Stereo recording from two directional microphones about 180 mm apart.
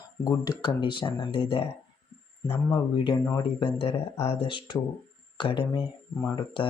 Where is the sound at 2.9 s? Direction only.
25° left (ahead or behind).